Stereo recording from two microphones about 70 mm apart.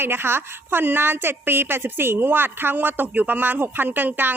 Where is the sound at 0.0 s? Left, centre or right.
Right.